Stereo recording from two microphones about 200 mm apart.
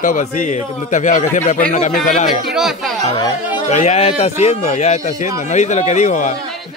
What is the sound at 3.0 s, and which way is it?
A man's voice, 25° left (ahead or behind).